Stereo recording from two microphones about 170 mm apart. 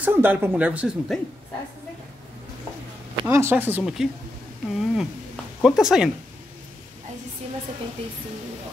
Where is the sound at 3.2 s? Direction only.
15° right (ahead or behind).